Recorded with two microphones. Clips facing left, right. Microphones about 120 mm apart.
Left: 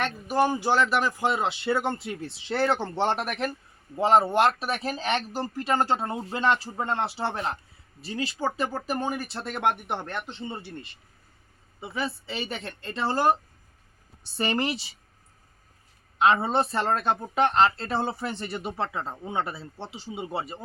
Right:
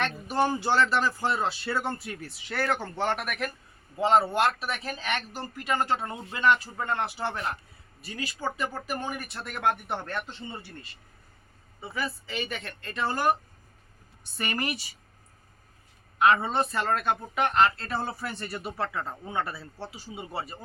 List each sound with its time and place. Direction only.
0.0 s speech: 10° left (ahead or behind)
4.4 s speech: 35° left (ahead or behind)
11.8 s speech: 25° left (ahead or behind)
14.3 s speech: 30° left (ahead or behind)
16.1 s speech: 25° left (ahead or behind)